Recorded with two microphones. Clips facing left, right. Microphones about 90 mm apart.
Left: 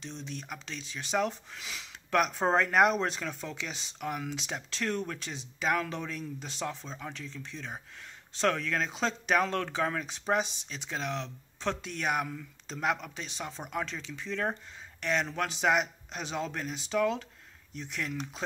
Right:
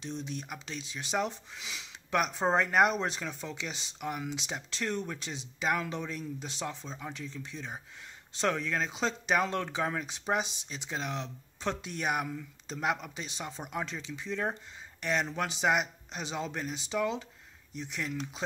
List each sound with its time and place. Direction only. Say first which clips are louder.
0.0 s speech: right 3 dB; 10° right (ahead or behind)
10.4 s speech: left 2 dB; 35° left (ahead or behind)
10.7 s speech: left 1 dB; 5° right (ahead or behind)